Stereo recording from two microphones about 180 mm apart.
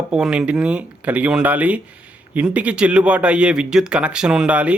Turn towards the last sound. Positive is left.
turn(degrees=-5)  # may be behind; listen again after turning